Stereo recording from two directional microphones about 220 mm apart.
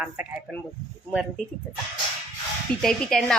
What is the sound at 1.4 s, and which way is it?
Speech, 35° left (ahead or behind).